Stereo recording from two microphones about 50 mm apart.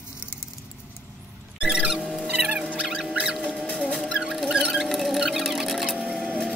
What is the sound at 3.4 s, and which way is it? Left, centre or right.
Rodents, centre.